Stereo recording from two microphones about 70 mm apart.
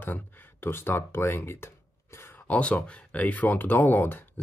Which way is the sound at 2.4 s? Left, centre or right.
Centre.